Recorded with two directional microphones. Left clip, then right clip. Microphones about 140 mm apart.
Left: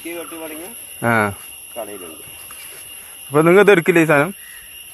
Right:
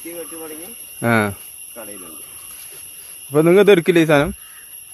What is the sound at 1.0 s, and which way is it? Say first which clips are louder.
Speech: left 1 dB; 50° right (ahead or behind).